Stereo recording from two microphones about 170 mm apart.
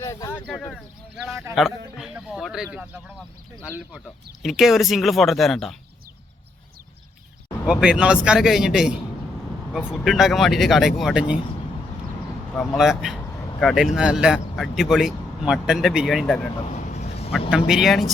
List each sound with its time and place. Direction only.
0.0 s a sound: 20° left (ahead or behind)
0.4 s speech: 5° left (ahead or behind)
7.7 s speech: 5° right (ahead or behind)
12.5 s speech: centre (ahead or behind)
16.2 s speech: 10° left (ahead or behind)
16.7 s vehicle: 45° left (ahead or behind)
17.7 s speech: centre (ahead or behind)